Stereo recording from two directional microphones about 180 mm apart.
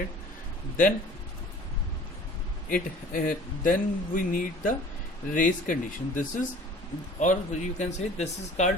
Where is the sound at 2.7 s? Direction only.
50° left (ahead or behind).